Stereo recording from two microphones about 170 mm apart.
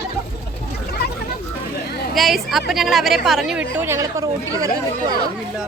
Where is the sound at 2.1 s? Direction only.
Centre (ahead or behind).